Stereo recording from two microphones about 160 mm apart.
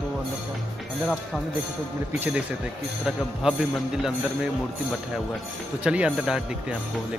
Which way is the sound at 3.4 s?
5° right (ahead or behind).